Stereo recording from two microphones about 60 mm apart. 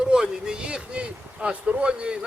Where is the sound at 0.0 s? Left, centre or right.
Centre.